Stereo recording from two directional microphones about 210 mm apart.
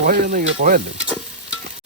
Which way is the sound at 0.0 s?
40° right (ahead or behind).